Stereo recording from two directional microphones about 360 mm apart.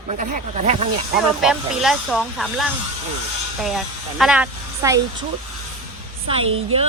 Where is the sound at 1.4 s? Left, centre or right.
Centre.